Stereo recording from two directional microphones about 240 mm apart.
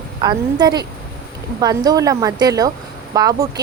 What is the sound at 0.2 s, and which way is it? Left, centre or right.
Speech, centre.